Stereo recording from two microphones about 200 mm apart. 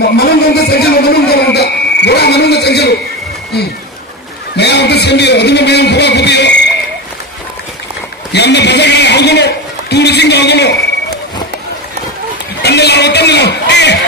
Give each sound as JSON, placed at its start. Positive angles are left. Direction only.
{"t": 0.0, "sound": "a man's voice", "side_deg": 50}
{"t": 4.6, "sound": "a man's voice", "side_deg": 55}
{"t": 8.3, "sound": "a man's voice", "side_deg": 60}
{"t": 12.6, "sound": "a sound", "side_deg": 55}